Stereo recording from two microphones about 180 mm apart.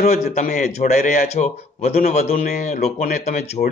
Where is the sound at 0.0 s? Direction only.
40° left (ahead or behind).